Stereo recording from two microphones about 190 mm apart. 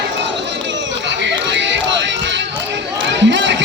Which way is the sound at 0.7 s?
70° right (ahead or behind).